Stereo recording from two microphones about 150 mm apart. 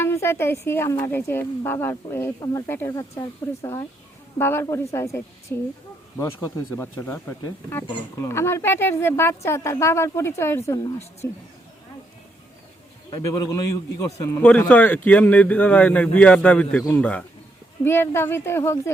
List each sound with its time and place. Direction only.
0.0 s a man's voice: 15° left (ahead or behind)
13.1 s a man's voice: 25° left (ahead or behind)